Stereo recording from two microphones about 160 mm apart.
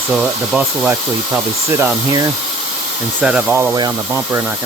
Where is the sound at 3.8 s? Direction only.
20° right (ahead or behind).